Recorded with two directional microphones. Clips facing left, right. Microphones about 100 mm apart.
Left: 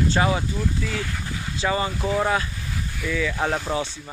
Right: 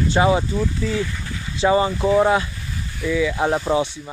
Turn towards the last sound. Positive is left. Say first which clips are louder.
# right 5 dB
turn(degrees=-20)  # may be behind; listen again after turning